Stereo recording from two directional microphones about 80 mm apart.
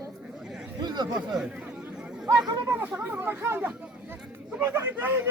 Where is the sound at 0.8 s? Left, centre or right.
Right.